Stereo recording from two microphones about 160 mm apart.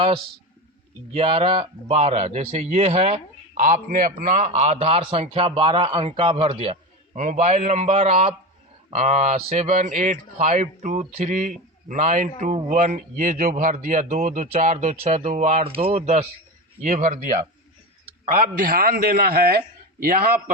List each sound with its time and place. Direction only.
1.1 s a man's voice: 35° right (ahead or behind)
3.6 s a man's voice: 60° right (ahead or behind)